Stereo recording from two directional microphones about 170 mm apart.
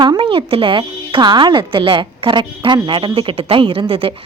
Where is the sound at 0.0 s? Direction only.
30° right (ahead or behind).